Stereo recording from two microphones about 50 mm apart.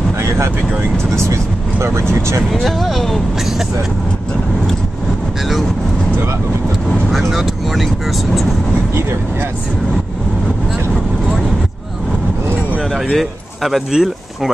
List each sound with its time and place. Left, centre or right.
1.1 s speech: right
2.5 s speech: centre
7.1 s speech: centre
12.9 s speech: centre